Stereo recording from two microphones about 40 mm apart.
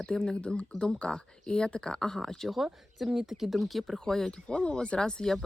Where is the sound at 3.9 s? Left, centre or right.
Centre.